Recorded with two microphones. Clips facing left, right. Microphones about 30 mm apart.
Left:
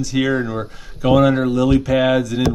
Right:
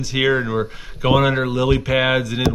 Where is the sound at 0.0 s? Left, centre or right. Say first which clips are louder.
Even; right.